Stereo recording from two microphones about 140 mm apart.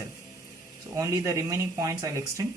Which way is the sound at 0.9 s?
25° right (ahead or behind).